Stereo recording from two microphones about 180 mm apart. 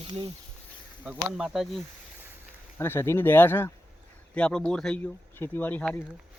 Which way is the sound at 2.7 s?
15° left (ahead or behind).